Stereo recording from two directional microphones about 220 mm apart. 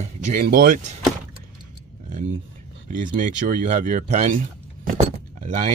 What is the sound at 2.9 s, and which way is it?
Speech, 35° right (ahead or behind).